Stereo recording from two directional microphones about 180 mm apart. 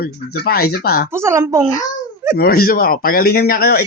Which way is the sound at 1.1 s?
15° right (ahead or behind).